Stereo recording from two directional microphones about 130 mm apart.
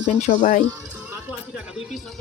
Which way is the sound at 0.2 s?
55° left (ahead or behind).